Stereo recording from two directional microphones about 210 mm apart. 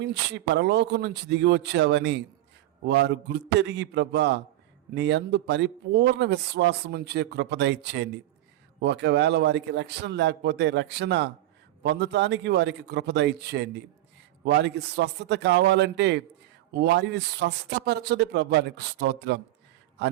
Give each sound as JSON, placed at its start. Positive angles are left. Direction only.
{"t": 0.0, "sound": "a man's voice", "side_deg": -55}